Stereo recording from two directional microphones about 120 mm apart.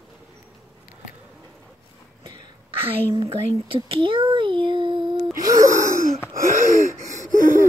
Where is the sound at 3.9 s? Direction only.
50° right (ahead or behind).